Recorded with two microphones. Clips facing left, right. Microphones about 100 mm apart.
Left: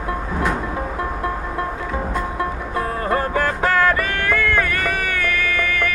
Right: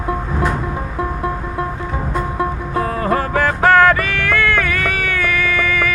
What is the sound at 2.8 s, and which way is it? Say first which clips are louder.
Music: right 3 dB; 90° right.